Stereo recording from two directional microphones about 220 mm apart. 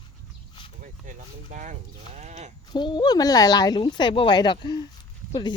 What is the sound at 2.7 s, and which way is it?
Speech, 20° left (ahead or behind).